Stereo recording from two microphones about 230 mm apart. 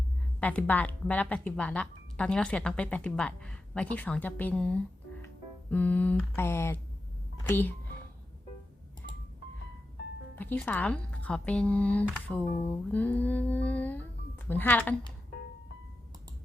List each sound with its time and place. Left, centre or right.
0.3 s speech: centre
5.7 s mantra: centre
10.3 s speech: centre